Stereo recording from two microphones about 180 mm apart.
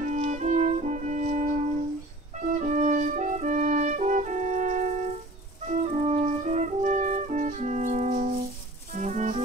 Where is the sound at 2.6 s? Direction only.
40° right (ahead or behind).